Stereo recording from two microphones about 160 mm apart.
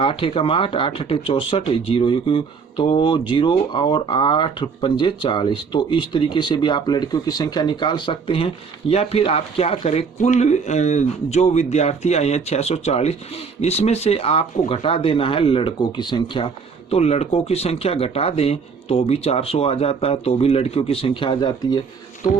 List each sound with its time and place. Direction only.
0.0 s speech: 35° left (ahead or behind)
16.9 s speech: 40° left (ahead or behind)